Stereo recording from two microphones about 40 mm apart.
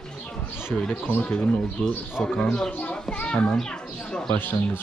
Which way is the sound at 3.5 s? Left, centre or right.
Centre.